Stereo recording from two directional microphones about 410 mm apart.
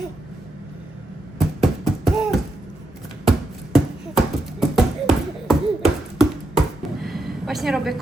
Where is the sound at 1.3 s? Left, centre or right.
Centre.